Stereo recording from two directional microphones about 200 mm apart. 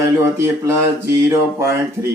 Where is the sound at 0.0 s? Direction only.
15° right (ahead or behind).